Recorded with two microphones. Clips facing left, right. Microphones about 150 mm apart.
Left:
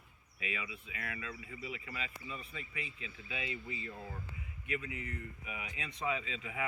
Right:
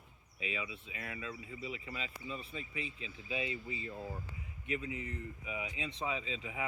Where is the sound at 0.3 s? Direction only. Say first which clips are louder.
Right 1 dB; 25° right (ahead or behind).